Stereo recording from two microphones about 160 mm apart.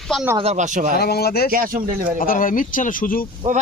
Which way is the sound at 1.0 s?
75° left (ahead or behind).